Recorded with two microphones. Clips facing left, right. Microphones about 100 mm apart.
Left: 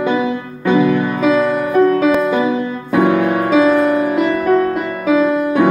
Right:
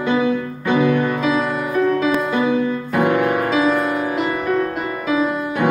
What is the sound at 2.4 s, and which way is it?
Music, 5° left (ahead or behind).